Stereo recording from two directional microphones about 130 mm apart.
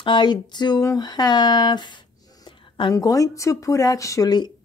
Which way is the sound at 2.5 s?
40° left (ahead or behind).